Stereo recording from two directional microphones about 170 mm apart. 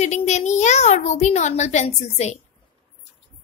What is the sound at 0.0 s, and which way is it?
A child's voice, 40° left (ahead or behind).